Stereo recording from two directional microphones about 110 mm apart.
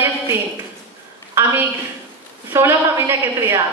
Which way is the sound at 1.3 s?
20° right (ahead or behind).